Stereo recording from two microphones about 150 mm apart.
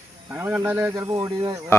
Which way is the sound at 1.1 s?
30° right (ahead or behind).